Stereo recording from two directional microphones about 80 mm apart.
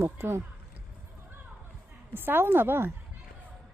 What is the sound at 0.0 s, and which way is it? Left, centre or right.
Speech, right.